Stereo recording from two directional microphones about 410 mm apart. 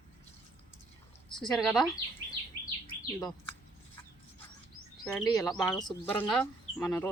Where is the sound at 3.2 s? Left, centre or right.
Centre.